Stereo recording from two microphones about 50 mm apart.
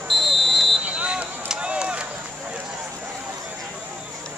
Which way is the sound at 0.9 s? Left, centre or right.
Right.